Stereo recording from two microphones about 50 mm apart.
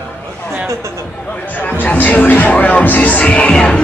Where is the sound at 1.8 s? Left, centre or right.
Left.